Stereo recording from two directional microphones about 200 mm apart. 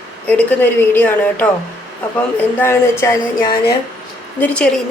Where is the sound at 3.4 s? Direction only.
50° left (ahead or behind).